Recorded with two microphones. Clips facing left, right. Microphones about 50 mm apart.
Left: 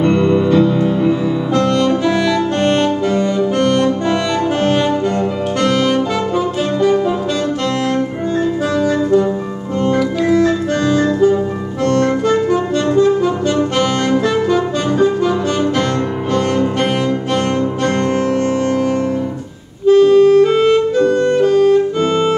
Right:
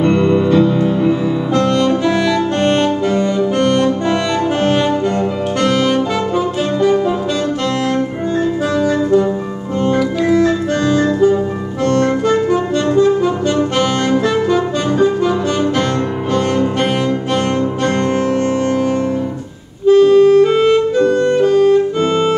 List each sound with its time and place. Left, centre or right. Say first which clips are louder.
0.0 s music: even; centre
5.6 s saxophone: even; centre
8.6 s music: even; centre
11.8 s accordion: even; centre
13.0 s saxophone: even; centre
19.9 s clarinet: even; right
20.9 s music: even; centre